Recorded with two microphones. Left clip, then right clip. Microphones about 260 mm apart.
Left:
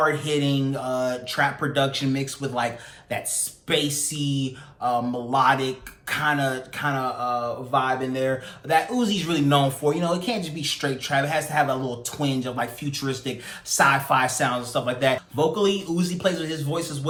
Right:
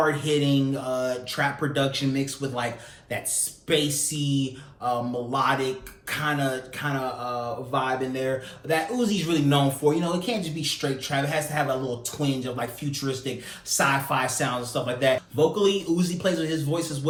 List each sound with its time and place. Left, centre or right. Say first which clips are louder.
0.0 s speech: left 1 dB; centre